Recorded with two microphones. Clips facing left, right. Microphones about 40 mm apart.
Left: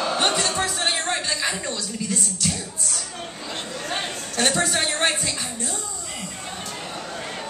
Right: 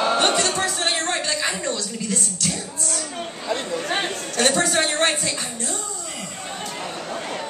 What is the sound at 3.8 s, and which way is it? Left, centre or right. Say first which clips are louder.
Chatter: right 4 dB; right.